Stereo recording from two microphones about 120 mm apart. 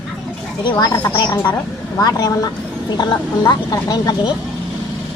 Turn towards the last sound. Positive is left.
turn(degrees=35)  # may be behind; listen again after turning